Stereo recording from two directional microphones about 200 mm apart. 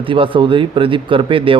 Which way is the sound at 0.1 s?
25° right (ahead or behind).